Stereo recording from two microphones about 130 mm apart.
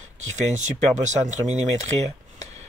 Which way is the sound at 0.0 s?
65° right (ahead or behind).